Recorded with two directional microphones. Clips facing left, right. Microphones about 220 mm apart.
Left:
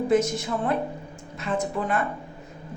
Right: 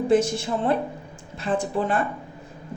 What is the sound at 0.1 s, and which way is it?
A woman's voice, 30° right (ahead or behind).